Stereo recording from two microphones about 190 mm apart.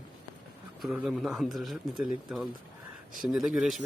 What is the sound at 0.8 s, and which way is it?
Speech, 5° right (ahead or behind).